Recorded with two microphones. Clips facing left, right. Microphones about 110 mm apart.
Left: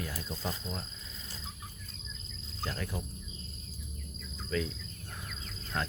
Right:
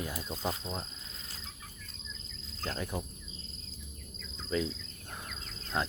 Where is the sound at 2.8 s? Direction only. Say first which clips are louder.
Right 2 dB; 20° right (ahead or behind).